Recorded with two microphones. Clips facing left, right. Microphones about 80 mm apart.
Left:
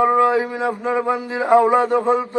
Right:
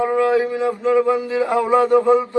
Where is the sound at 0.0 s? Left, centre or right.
Left.